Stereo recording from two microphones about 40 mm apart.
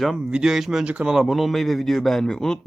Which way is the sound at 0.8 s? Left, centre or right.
Right.